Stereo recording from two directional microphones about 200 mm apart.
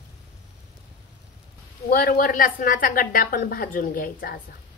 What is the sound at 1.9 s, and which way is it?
A woman's voice, 50° left (ahead or behind).